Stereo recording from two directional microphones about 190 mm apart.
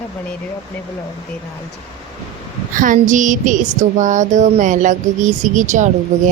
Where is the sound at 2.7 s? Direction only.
45° right (ahead or behind).